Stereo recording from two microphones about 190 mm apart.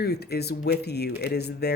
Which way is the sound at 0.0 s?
60° left (ahead or behind).